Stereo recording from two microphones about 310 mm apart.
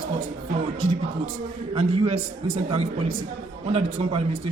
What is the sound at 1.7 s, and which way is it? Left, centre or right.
Speech, centre.